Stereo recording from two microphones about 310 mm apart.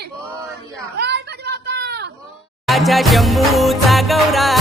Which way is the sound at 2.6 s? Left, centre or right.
Centre.